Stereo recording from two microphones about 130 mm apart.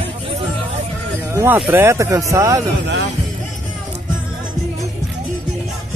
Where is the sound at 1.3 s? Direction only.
20° right (ahead or behind).